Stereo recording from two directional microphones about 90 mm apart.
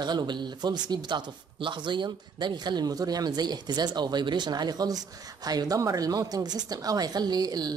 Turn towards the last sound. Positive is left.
turn(degrees=-45)  # may be behind; listen again after turning